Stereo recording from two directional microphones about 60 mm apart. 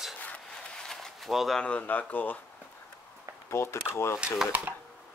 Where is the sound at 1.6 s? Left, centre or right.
Left.